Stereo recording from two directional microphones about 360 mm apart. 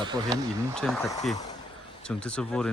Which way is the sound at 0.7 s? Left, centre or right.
Centre.